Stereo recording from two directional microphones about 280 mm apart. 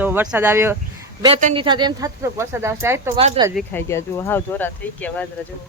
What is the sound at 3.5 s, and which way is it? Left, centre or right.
Speech, centre.